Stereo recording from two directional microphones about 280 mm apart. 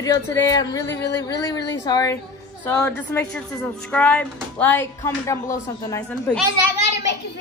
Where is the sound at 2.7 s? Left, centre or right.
Centre.